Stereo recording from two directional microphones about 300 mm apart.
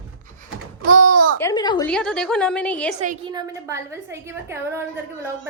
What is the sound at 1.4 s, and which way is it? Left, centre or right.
Speech, centre.